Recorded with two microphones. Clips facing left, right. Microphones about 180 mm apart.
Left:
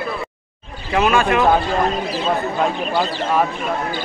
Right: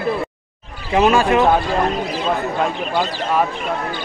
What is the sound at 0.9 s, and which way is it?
Speech, 30° right (ahead or behind).